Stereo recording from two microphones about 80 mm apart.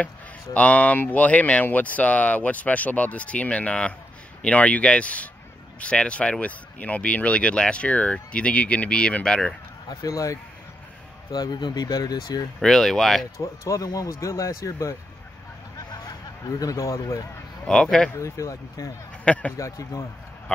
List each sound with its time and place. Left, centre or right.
0.6 s speech: centre
9.8 s speech: left
11.3 s speech: left
12.5 s speech: centre
13.4 s speech: left
15.9 s a sound: left
17.6 s speech: centre
18.1 s speech: left
19.2 s speech: centre
19.5 s speech: left